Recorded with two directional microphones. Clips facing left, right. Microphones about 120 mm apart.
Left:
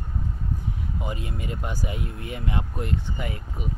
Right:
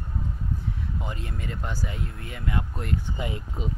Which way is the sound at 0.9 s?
15° left (ahead or behind).